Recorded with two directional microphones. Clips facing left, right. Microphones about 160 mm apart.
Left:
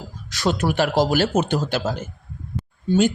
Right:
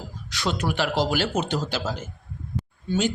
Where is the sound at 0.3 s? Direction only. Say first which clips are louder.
Left 5 dB; 45° left (ahead or behind).